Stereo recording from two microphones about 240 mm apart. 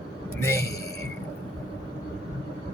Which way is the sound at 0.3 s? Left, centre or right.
Centre.